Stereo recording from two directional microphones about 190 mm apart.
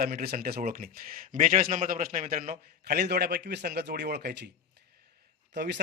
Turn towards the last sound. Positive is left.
turn(degrees=-60)  # may be behind; listen again after turning